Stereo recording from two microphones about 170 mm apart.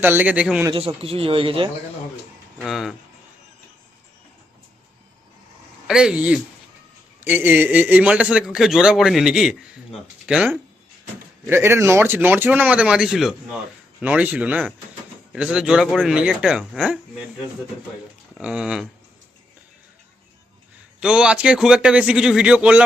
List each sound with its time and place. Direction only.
0.0 s speech: 10° right (ahead or behind)
0.7 s a man's voice: 35° right (ahead or behind)
2.6 s a man's voice: centre (ahead or behind)
5.9 s a man's voice: 5° right (ahead or behind)
18.3 s a man's voice: 5° right (ahead or behind)
21.0 s a man's voice: 5° right (ahead or behind)